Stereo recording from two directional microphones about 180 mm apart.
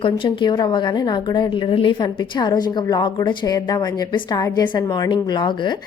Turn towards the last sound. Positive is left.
turn(degrees=25)  # may be behind; listen again after turning